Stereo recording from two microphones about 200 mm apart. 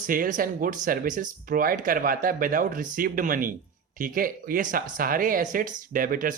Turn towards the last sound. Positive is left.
turn(degrees=-45)  # may be behind; listen again after turning